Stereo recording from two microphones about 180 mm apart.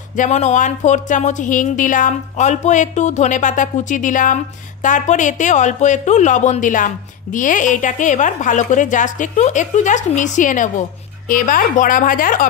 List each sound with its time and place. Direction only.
0.1 s a woman's voice: 45° left (ahead or behind)